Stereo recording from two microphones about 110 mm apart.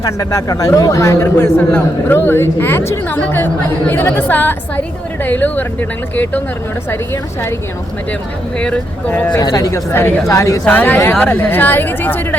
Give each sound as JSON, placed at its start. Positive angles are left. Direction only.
{"t": 0.0, "sound": "a man's voice", "side_deg": 30}
{"t": 8.5, "sound": "speech", "side_deg": 10}
{"t": 9.4, "sound": "a man's voice", "side_deg": 35}
{"t": 10.7, "sound": "speech", "side_deg": 15}